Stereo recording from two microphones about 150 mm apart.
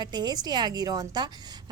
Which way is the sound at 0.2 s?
25° right (ahead or behind).